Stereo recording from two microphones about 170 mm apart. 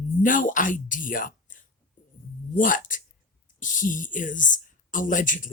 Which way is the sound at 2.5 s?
50° left (ahead or behind).